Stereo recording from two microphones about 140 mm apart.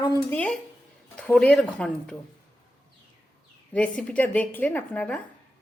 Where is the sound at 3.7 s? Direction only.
10° left (ahead or behind).